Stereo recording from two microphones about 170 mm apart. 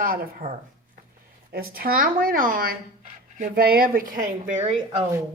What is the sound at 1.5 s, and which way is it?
Speech, 60° right (ahead or behind).